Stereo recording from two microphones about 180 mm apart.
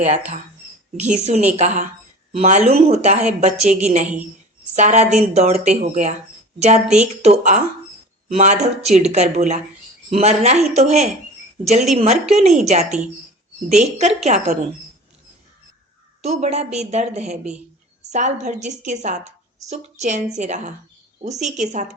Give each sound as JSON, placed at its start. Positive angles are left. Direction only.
{"t": 0.9, "sound": "a woman's voice", "side_deg": -40}
{"t": 6.8, "sound": "speech", "side_deg": -5}
{"t": 7.2, "sound": "a woman's voice", "side_deg": -40}
{"t": 16.2, "sound": "a woman's voice", "side_deg": -35}